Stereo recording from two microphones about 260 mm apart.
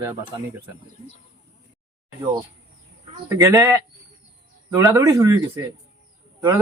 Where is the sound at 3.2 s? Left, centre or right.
Centre.